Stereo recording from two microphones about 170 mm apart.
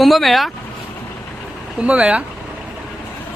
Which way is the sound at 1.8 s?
5° right (ahead or behind).